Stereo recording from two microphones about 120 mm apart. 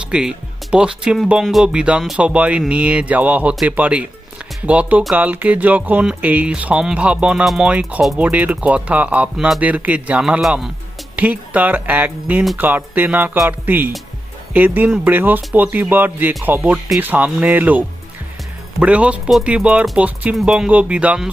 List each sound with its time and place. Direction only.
0.1 s speech: 5° right (ahead or behind)